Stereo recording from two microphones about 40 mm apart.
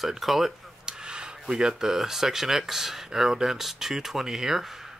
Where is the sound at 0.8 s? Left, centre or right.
Centre.